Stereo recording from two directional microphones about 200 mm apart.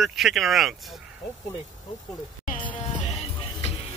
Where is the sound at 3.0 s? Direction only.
35° left (ahead or behind).